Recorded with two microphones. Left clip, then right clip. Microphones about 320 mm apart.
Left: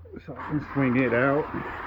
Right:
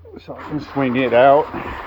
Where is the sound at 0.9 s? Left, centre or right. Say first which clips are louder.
Right 12 dB; right.